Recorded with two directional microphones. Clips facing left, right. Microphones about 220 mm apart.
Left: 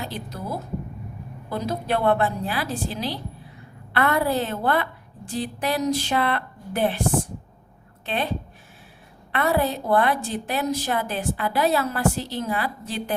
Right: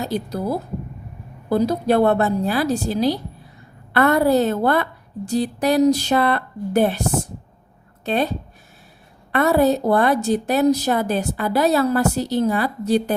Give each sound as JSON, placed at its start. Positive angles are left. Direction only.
{"t": 0.0, "sound": "a woman's voice", "side_deg": -40}
{"t": 8.0, "sound": "a woman's voice", "side_deg": -40}